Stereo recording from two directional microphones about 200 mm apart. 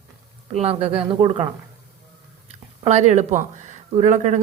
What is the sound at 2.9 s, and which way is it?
Speech, 35° right (ahead or behind).